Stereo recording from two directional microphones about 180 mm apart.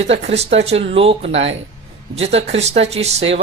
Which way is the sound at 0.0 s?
35° right (ahead or behind).